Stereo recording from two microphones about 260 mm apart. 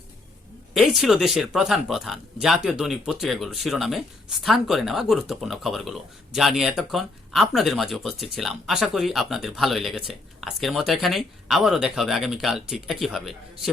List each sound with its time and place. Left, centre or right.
0.7 s speech: centre